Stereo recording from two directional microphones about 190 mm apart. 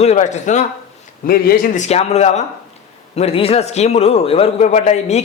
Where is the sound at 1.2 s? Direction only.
50° left (ahead or behind).